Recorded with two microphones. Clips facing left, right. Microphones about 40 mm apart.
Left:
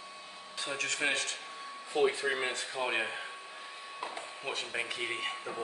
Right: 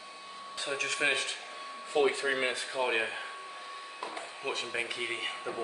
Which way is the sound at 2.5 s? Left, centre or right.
Centre.